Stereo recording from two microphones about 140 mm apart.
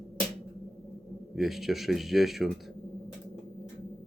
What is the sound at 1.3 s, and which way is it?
Speech, centre (ahead or behind).